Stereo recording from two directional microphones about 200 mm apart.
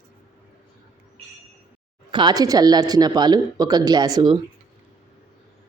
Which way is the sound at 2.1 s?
20° right (ahead or behind).